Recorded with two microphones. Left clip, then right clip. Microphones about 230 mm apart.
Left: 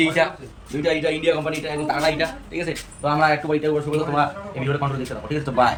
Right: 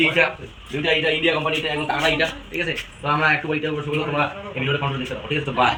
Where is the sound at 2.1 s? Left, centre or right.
Centre.